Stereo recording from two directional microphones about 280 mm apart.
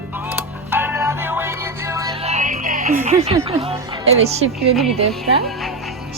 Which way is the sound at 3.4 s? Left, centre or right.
Centre.